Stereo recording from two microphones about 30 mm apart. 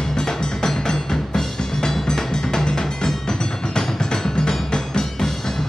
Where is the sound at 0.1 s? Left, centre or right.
Left.